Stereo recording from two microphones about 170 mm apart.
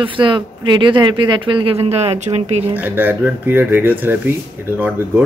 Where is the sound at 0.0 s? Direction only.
30° right (ahead or behind).